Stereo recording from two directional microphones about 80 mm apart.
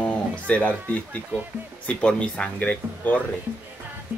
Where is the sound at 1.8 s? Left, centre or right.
Centre.